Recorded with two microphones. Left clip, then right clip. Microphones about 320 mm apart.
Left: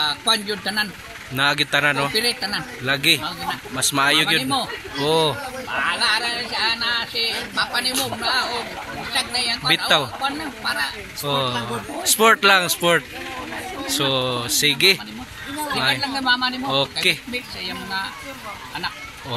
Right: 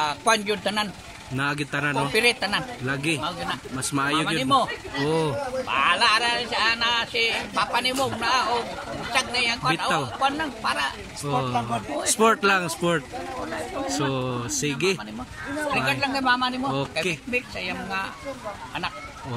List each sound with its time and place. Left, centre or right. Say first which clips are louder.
0.3 s a man's voice: left 1 dB; centre